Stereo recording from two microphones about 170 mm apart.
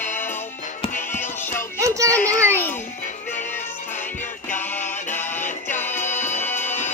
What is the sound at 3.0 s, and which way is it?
Music, 45° left (ahead or behind).